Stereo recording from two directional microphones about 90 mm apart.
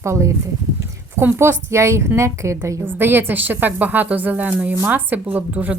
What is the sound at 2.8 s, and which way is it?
A woman's voice, 25° right (ahead or behind).